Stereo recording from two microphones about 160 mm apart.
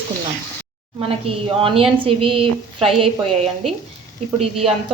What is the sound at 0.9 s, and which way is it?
A woman's voice, 35° right (ahead or behind).